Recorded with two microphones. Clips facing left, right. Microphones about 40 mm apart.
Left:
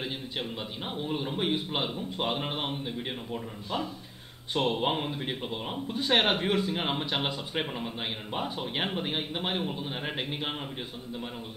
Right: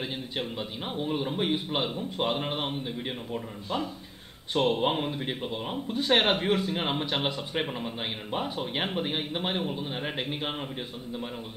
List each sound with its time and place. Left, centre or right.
0.6 s speech: centre